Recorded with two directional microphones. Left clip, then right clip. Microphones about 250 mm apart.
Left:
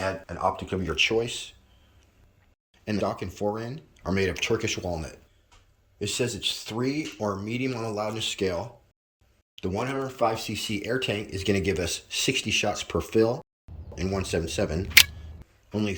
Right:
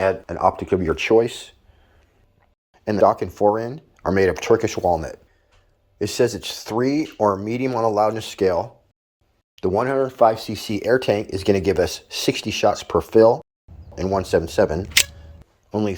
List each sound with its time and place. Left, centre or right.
0.0 s speech: right
2.8 s speech: centre